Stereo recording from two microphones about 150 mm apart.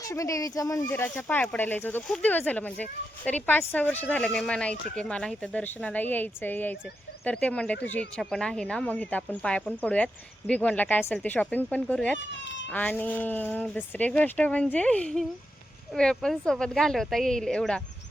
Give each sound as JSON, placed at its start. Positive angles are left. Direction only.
{"t": 0.0, "sound": "speech", "side_deg": 20}
{"t": 2.0, "sound": "a woman's voice", "side_deg": 0}